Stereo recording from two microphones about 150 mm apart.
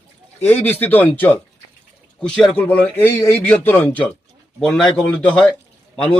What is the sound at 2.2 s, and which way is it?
A man's voice, 5° left (ahead or behind).